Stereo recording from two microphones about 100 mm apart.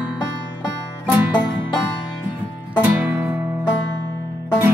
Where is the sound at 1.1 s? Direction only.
15° right (ahead or behind).